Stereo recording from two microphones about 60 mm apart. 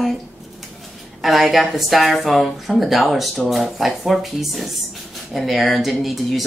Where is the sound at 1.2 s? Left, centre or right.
Centre.